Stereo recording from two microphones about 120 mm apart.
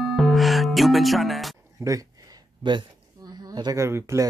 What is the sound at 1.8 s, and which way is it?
Speech, 30° right (ahead or behind).